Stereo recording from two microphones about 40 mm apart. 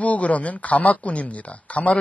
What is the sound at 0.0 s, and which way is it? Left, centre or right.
Speech, left.